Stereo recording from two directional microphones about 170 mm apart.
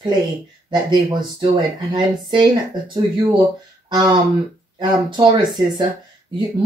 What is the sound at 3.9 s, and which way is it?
Speech, 30° right (ahead or behind).